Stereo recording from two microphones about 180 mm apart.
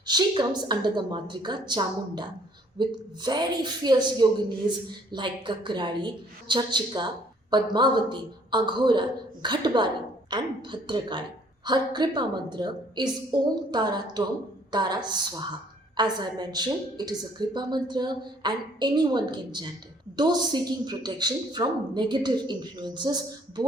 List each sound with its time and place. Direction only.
0.0 s a woman's voice: 25° right (ahead or behind)